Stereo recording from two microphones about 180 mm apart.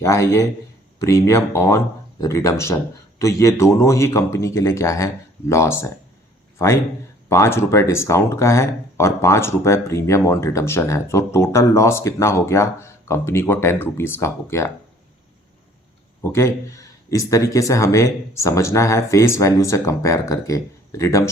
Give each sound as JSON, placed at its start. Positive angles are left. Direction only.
{"t": 0.0, "sound": "speech", "side_deg": 15}
{"t": 7.3, "sound": "speech", "side_deg": 15}
{"t": 16.3, "sound": "speech", "side_deg": 15}